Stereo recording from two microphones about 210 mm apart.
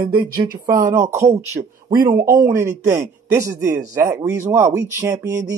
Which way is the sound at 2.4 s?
15° right (ahead or behind).